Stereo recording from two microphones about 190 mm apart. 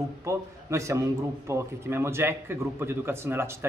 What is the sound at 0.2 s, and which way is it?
A man's voice, 15° right (ahead or behind).